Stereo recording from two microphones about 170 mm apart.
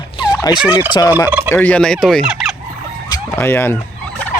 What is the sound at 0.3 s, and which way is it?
Fowl, 20° left (ahead or behind).